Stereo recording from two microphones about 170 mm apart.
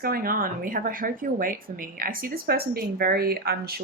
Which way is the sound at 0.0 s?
60° right (ahead or behind).